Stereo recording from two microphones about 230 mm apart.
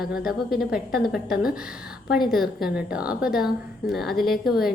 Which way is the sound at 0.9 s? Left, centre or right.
Left.